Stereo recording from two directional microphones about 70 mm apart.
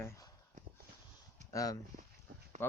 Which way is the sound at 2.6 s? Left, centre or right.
Left.